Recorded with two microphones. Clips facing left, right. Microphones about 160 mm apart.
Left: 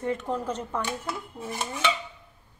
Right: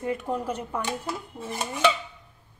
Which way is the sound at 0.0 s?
10° right (ahead or behind).